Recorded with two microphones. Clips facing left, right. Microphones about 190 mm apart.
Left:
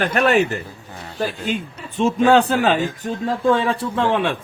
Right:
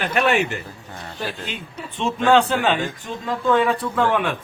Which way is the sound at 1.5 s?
45° left (ahead or behind).